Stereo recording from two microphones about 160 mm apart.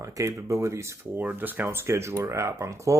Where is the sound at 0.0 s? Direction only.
20° right (ahead or behind).